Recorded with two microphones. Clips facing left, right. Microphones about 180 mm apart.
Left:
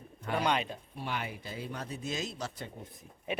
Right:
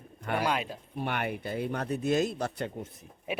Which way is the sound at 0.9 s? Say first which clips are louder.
Right 6 dB; 60° right (ahead or behind).